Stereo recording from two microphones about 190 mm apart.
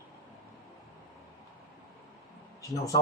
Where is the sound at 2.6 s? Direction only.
15° left (ahead or behind).